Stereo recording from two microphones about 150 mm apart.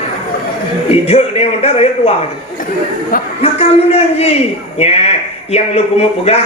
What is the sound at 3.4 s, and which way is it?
Speech, 45° left (ahead or behind).